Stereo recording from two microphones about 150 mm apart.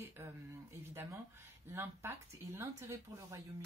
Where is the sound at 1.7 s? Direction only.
15° right (ahead or behind).